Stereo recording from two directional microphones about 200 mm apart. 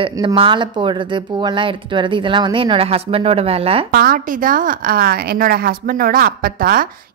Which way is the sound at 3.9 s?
45° right (ahead or behind).